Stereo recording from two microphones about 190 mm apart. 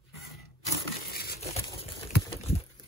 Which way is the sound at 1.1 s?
55° left (ahead or behind).